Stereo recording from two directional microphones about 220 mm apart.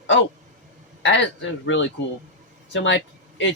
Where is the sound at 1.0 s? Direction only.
55° left (ahead or behind).